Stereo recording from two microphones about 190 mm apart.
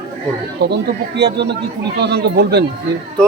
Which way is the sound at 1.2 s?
60° right (ahead or behind).